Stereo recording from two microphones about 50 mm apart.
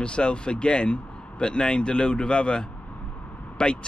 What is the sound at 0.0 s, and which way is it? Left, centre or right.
Speech, left.